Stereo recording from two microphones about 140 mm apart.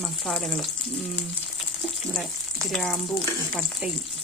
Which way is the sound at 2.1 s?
5° left (ahead or behind).